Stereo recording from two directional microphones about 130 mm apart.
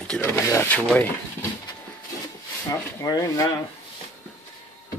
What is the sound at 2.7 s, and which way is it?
Speech, 25° left (ahead or behind).